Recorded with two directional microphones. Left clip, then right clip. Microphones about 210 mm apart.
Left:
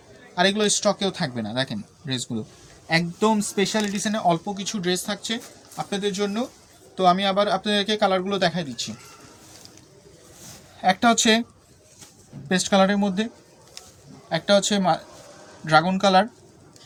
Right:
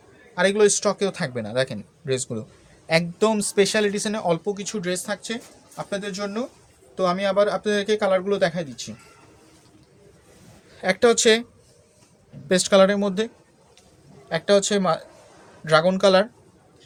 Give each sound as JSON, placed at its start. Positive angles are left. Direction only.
{"t": 0.3, "sound": "speech", "side_deg": -45}
{"t": 10.8, "sound": "speech", "side_deg": -50}
{"t": 12.5, "sound": "speech", "side_deg": -60}